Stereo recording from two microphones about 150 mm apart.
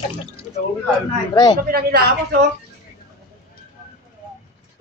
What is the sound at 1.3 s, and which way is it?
Speech, 30° left (ahead or behind).